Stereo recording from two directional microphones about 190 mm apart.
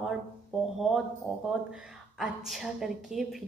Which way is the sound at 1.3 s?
Centre (ahead or behind).